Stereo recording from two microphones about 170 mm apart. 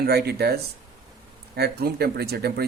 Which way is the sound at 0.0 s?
70° right (ahead or behind).